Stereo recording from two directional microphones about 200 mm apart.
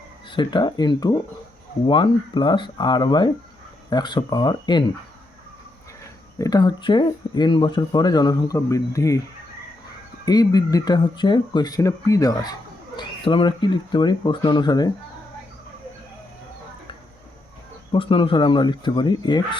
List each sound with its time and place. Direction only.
0.3 s speech: 20° left (ahead or behind)
6.4 s speech: 20° left (ahead or behind)
10.2 s speech: 20° left (ahead or behind)
17.9 s speech: 25° left (ahead or behind)